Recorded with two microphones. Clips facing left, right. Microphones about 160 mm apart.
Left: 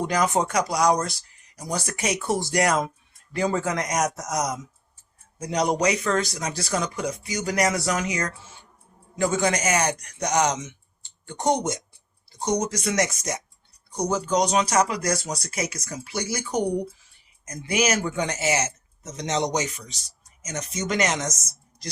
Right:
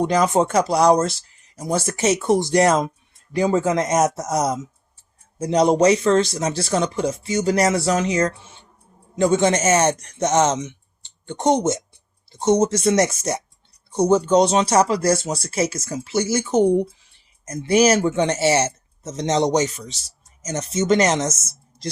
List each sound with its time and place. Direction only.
0.0 s a man's voice: 20° right (ahead or behind)